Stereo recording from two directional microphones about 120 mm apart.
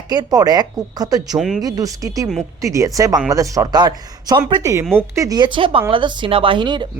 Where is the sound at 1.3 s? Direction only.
5° right (ahead or behind).